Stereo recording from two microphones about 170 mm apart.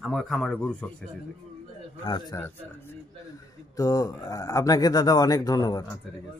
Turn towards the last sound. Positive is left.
turn(degrees=20)  # may be behind; listen again after turning